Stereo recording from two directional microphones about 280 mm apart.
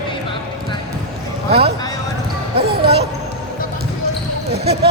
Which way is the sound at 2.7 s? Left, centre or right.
Right.